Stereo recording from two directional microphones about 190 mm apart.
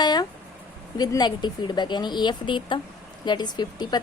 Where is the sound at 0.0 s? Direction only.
20° left (ahead or behind).